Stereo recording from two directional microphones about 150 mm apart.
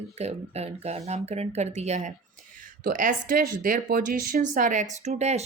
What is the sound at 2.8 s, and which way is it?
Speech, 60° right (ahead or behind).